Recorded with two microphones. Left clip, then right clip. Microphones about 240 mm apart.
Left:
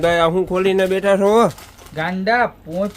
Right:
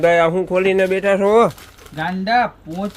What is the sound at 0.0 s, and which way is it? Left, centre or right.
Speech, centre.